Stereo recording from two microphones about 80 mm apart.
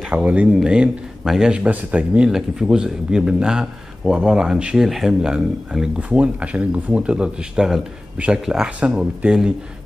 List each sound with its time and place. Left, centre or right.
0.1 s speech: centre
1.5 s speech: centre